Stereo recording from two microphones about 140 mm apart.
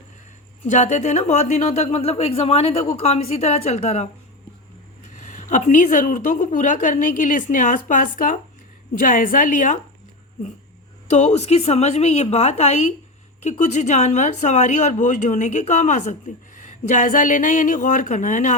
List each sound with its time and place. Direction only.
0.6 s speech: 60° left (ahead or behind)
5.0 s a woman's voice: 65° left (ahead or behind)
11.1 s a woman's voice: 55° left (ahead or behind)